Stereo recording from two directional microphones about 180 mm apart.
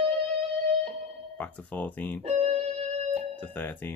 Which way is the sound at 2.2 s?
35° right (ahead or behind).